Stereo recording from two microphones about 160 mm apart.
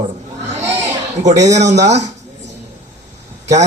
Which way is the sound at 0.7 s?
45° right (ahead or behind).